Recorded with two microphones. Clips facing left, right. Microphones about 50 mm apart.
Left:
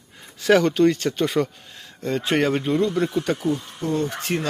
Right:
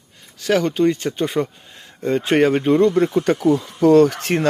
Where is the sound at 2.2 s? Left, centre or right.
Right.